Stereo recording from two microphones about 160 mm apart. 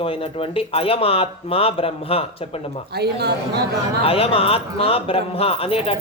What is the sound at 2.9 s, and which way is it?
Speech, 90° right.